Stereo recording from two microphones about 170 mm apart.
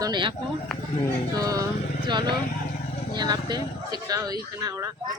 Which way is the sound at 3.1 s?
25° right (ahead or behind).